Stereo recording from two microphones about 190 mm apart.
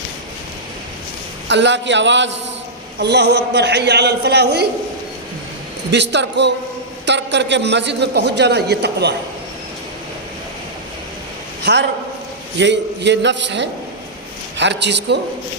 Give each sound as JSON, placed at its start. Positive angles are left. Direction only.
{"t": 1.5, "sound": "a man's voice", "side_deg": -65}
{"t": 5.9, "sound": "a man's voice", "side_deg": -65}
{"t": 11.6, "sound": "a man's voice", "side_deg": -65}